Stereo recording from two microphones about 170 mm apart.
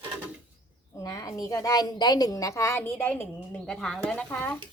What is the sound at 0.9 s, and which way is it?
A woman's voice, 20° left (ahead or behind).